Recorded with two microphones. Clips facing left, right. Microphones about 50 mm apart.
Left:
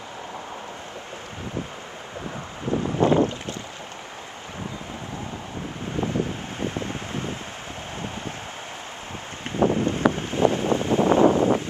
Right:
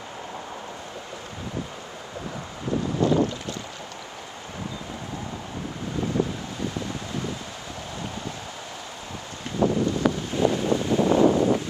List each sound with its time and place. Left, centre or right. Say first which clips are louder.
2.7 s boat: left 2 dB; left
5.9 s wind: even; left
9.5 s wind noise: left 1 dB; left